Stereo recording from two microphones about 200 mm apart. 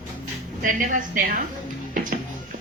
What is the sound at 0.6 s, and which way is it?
Speech, 40° right (ahead or behind).